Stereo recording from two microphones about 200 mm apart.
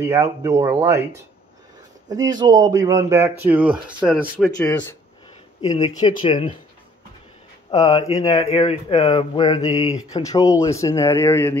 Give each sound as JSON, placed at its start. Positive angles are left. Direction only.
{"t": 0.0, "sound": "speech", "side_deg": -15}
{"t": 2.0, "sound": "speech", "side_deg": -20}
{"t": 4.5, "sound": "speech", "side_deg": 15}
{"t": 5.9, "sound": "speech", "side_deg": 20}
{"t": 7.7, "sound": "speech", "side_deg": 25}